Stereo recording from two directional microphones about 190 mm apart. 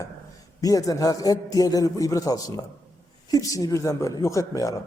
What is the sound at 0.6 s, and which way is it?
A man's voice, 20° left (ahead or behind).